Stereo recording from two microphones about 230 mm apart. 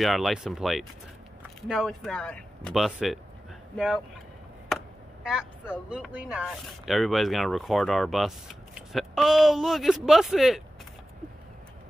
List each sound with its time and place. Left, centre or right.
0.0 s speech: centre
4.6 s chop: centre
5.9 s speech: centre